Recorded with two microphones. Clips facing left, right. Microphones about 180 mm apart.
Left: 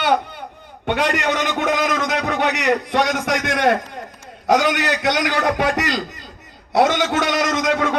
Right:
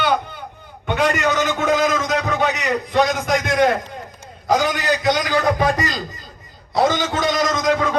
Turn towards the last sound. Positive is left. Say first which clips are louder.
# right 1 dB
turn(degrees=70)  # may be behind; listen again after turning